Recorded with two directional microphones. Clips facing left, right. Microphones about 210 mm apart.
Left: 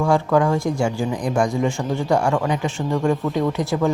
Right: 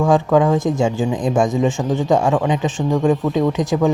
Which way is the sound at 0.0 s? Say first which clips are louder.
Right 3 dB; 20° right (ahead or behind).